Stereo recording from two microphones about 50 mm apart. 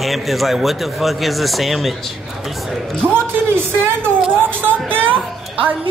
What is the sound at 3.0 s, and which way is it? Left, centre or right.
Speech, right.